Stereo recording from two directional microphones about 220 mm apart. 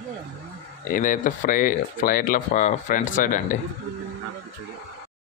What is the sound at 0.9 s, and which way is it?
Speech, 35° left (ahead or behind).